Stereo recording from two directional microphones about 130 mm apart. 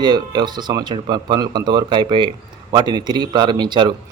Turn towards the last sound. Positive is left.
turn(degrees=-35)  # may be behind; listen again after turning